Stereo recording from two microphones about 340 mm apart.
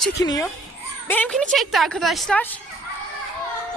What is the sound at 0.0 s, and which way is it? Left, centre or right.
A woman's voice, centre.